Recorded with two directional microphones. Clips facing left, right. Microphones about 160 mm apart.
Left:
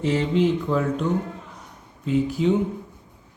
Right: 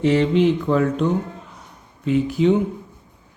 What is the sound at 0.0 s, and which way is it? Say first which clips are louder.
Speech: right 4 dB; 70° right (ahead or behind).